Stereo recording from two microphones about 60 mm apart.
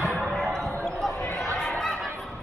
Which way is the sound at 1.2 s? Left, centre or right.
Left.